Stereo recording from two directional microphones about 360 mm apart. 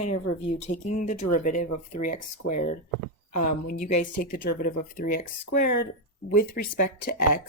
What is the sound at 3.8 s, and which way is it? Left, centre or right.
Speech, centre.